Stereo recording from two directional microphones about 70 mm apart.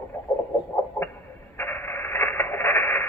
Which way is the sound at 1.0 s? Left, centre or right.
Left.